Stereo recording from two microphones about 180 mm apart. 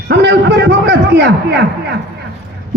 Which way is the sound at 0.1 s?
70° right (ahead or behind).